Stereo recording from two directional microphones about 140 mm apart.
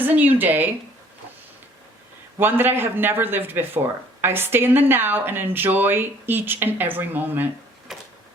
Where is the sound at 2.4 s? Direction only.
15° right (ahead or behind).